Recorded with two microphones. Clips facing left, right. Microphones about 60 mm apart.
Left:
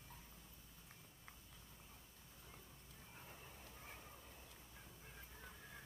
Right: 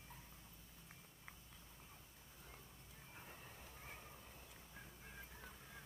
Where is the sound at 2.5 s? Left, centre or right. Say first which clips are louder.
Even; centre.